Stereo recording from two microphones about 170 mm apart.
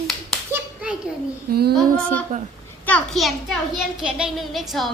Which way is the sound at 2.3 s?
50° right (ahead or behind).